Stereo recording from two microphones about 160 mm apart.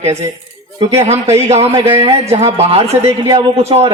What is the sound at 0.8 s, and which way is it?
A man's voice, 40° right (ahead or behind).